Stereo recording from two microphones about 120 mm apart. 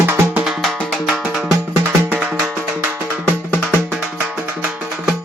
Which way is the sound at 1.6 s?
15° right (ahead or behind).